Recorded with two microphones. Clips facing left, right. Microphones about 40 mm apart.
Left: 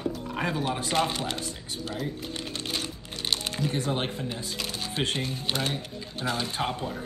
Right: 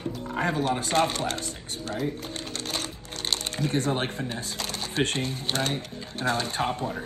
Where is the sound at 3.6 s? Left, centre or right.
Right.